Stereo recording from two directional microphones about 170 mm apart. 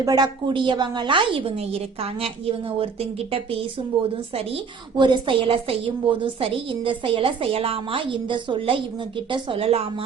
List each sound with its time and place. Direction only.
0.0 s a woman's voice: 25° right (ahead or behind)
4.4 s a woman's voice: 30° right (ahead or behind)